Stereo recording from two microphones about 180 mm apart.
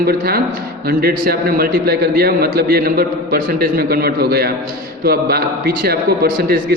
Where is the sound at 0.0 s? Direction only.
60° right (ahead or behind).